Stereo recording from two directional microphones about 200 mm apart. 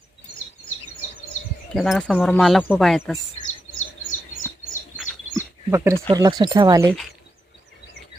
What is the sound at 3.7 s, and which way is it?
Bird, 85° left.